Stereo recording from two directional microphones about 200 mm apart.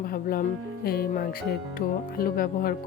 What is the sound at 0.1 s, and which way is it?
Speech, 45° left (ahead or behind).